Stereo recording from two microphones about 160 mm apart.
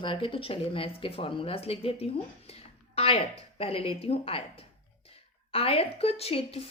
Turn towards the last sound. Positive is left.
turn(degrees=40)  # may be behind; listen again after turning